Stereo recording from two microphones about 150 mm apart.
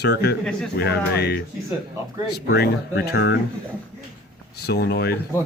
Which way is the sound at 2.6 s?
90° left.